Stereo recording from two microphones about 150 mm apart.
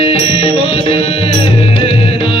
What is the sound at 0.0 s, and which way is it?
Music, 40° left (ahead or behind).